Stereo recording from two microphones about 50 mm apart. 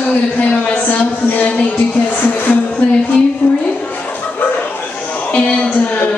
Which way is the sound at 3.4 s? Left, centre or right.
Left.